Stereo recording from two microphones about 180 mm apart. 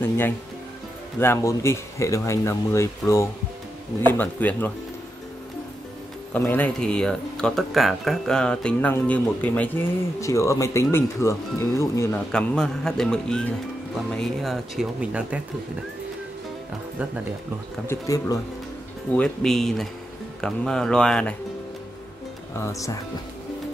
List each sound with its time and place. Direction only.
1.2 s speech: 15° left (ahead or behind)
6.3 s speech: 10° left (ahead or behind)
12.3 s speech: 5° left (ahead or behind)
17.8 s speech: 20° left (ahead or behind)
19.1 s speech: 5° left (ahead or behind)
22.6 s speech: 15° left (ahead or behind)